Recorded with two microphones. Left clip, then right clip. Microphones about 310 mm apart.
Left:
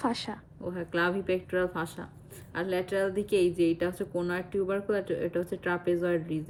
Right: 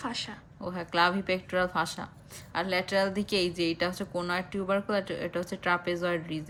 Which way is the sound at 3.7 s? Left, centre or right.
Centre.